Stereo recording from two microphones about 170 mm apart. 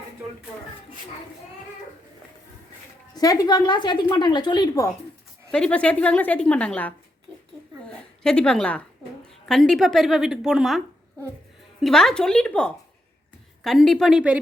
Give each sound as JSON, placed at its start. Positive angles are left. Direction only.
{"t": 3.2, "sound": "a woman's voice", "side_deg": 20}
{"t": 5.5, "sound": "a woman's voice", "side_deg": 5}